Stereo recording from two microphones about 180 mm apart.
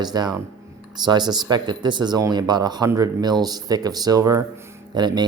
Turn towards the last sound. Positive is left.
turn(degrees=-25)  # may be behind; listen again after turning